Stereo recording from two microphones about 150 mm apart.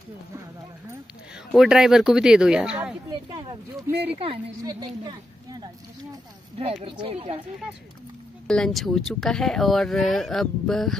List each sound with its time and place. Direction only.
1.5 s speech: 5° right (ahead or behind)
3.1 s a sound: 30° right (ahead or behind)
4.1 s speech: 40° right (ahead or behind)
4.6 s a woman's voice: 25° right (ahead or behind)
6.6 s speech: 40° right (ahead or behind)
8.5 s speech: 5° left (ahead or behind)